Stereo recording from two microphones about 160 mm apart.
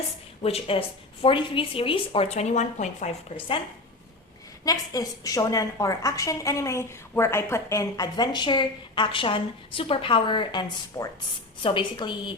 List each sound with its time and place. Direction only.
0.4 s speech: 35° left (ahead or behind)
4.6 s a woman's voice: 20° left (ahead or behind)